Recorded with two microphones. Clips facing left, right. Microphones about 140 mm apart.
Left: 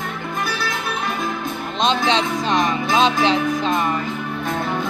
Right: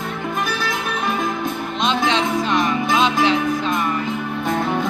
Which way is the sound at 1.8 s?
25° left (ahead or behind).